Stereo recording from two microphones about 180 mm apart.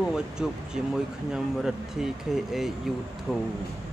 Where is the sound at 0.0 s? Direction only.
5° right (ahead or behind).